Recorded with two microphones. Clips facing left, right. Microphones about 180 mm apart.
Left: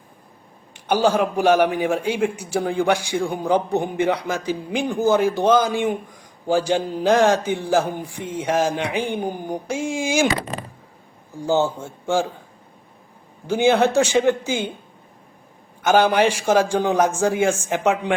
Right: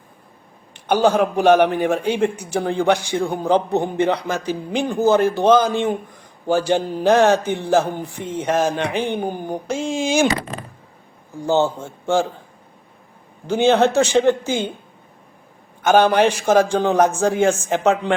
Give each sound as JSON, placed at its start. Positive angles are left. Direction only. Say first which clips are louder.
{"t": 0.9, "sound": "a man's voice", "louder": "right 2 dB", "side_deg": 10}
{"t": 11.3, "sound": "a man's voice", "louder": "right 2 dB", "side_deg": 10}
{"t": 13.5, "sound": "a man's voice", "louder": "right 1 dB", "side_deg": 10}
{"t": 16.1, "sound": "a man's voice", "louder": "right 2 dB", "side_deg": 10}